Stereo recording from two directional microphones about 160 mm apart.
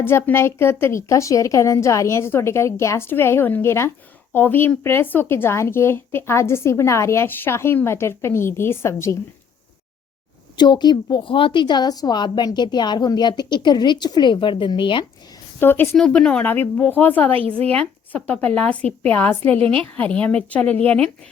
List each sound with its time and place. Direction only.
0.0 s speech: 15° left (ahead or behind)
10.6 s a woman's voice: 25° left (ahead or behind)
15.6 s speech: 15° left (ahead or behind)
19.4 s a woman's voice: 40° right (ahead or behind)
20.1 s speech: 10° left (ahead or behind)